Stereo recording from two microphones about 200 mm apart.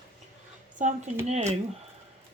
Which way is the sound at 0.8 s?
40° right (ahead or behind).